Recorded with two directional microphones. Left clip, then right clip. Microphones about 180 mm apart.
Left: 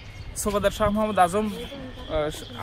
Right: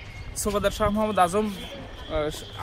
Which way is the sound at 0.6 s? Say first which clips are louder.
Left 1 dB; 15° left (ahead or behind).